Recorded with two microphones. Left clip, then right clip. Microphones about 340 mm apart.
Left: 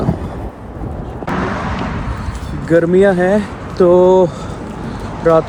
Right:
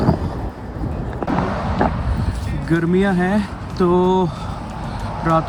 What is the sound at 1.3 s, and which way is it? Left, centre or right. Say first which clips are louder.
Boat: left 3 dB; right.